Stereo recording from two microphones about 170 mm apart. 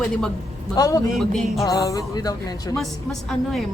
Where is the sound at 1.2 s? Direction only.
Centre (ahead or behind).